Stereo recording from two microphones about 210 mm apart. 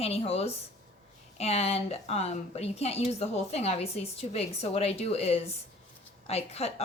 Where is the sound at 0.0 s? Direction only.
30° left (ahead or behind).